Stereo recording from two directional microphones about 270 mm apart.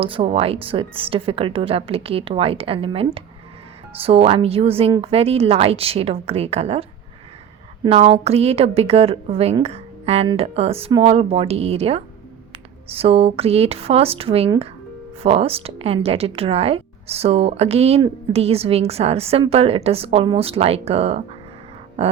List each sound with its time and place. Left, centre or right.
0.0 s a woman's voice: centre
7.9 s a woman's voice: right
22.0 s a sound: right